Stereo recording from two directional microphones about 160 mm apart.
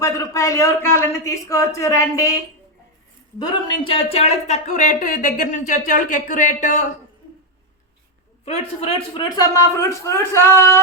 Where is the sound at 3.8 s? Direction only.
35° left (ahead or behind); by 6.8 s 50° left (ahead or behind).